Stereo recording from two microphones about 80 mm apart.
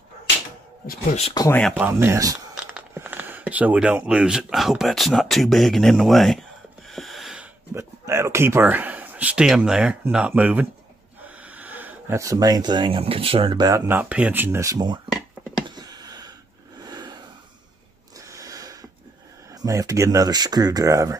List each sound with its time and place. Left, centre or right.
1.4 s speech: left
1.7 s speech: right
2.1 s speech: right
3.0 s speech: right; by 6.4 s centre
6.9 s a sound: centre
7.7 s speech: right
11.2 s a sound: centre
12.2 s speech: right
13.7 s speech: right
15.6 s a sound: right
18.1 s a sound: right
19.5 s speech: right